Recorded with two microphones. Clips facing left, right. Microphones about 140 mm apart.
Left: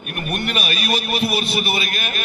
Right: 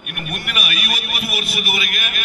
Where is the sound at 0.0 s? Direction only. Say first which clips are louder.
Left 5 dB; 35° left (ahead or behind).